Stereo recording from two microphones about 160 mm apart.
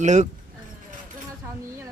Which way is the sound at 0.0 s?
50° right (ahead or behind).